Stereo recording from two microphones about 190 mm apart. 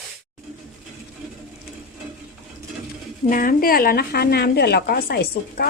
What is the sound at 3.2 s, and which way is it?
A woman's voice, 45° left (ahead or behind).